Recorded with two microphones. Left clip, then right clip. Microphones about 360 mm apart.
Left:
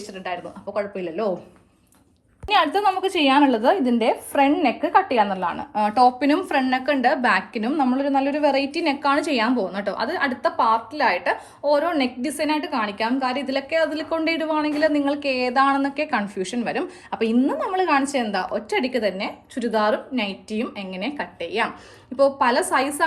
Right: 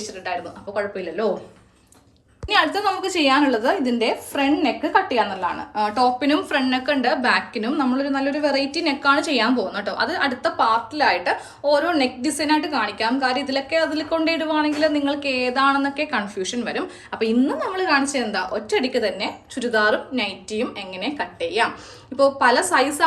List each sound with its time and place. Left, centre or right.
0.3 s a woman's voice: centre
2.5 s a woman's voice: centre